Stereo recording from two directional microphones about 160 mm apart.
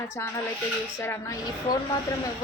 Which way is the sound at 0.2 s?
20° left (ahead or behind).